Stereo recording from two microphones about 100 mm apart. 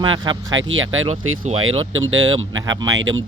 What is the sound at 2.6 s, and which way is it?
Speech, 45° right (ahead or behind).